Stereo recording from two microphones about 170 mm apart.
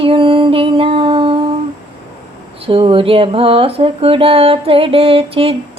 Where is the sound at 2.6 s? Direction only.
30° right (ahead or behind).